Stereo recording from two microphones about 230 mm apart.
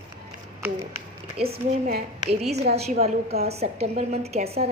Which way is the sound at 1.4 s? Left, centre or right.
Right.